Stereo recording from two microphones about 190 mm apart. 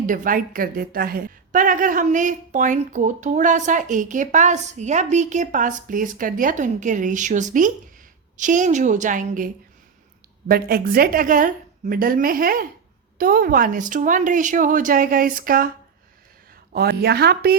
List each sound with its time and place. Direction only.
0.0 s a woman's voice: 45° right (ahead or behind)
10.5 s a woman's voice: 50° right (ahead or behind)
16.7 s a woman's voice: 55° right (ahead or behind)